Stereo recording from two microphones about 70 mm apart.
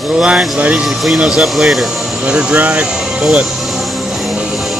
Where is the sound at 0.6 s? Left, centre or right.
Right.